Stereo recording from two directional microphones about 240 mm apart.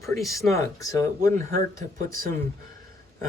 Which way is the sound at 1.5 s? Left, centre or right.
Right.